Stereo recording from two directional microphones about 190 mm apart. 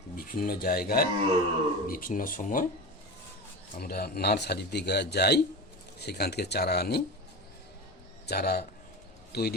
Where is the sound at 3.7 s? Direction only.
55° left (ahead or behind).